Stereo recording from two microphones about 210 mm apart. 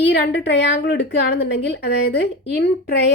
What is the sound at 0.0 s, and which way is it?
A woman's voice, 55° left (ahead or behind).